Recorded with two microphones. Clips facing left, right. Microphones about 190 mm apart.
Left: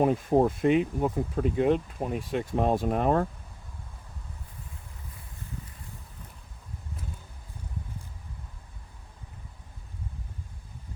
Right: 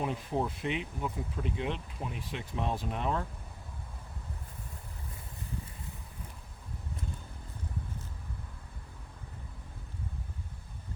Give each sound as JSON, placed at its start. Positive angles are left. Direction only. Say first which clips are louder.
{"t": 0.0, "sound": "speech", "louder": "left 10 dB", "side_deg": 50}